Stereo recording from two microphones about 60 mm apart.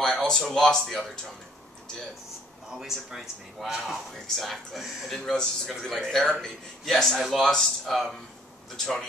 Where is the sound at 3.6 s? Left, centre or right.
Centre.